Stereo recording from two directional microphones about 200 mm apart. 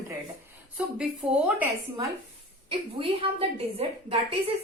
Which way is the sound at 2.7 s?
25° right (ahead or behind).